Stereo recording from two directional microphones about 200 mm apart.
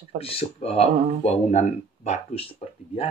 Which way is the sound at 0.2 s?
30° left (ahead or behind).